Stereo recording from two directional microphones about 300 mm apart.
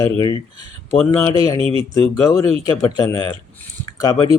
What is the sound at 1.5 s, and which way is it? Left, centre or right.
Speech, centre.